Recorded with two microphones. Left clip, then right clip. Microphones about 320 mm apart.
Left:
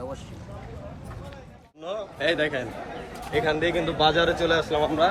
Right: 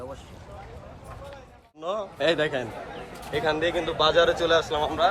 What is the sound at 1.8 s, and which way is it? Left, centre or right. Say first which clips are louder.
Speech: right 1 dB; centre.